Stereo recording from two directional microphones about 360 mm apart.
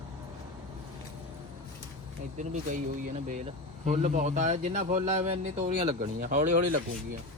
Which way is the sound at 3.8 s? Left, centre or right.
Right.